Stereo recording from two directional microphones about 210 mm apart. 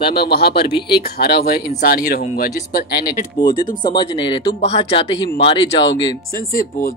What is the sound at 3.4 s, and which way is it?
Speech, 20° left (ahead or behind).